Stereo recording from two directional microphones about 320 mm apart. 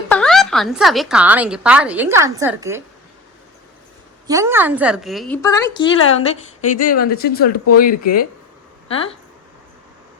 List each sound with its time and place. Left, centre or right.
0.1 s a woman's voice: centre
4.3 s a woman's voice: centre
7.1 s speech: left